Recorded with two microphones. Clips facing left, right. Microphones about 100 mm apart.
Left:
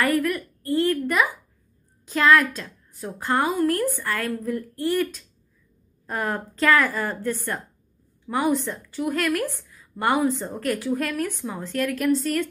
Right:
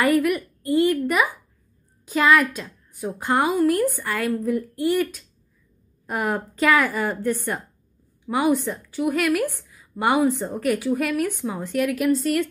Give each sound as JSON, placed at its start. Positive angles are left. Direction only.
{"t": 0.0, "sound": "a woman's voice", "side_deg": -15}
{"t": 8.3, "sound": "a woman's voice", "side_deg": -10}